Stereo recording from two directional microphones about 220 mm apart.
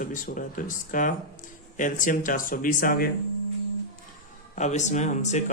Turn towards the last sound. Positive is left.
turn(degrees=30)  # may be behind; listen again after turning